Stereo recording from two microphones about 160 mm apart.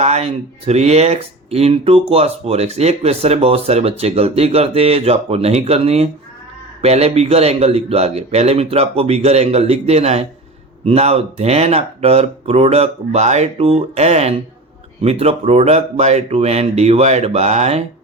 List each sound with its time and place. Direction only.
0.0 s speech: 40° right (ahead or behind)